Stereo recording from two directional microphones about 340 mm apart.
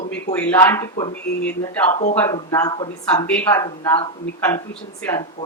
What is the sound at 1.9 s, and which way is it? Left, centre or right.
Speech, left.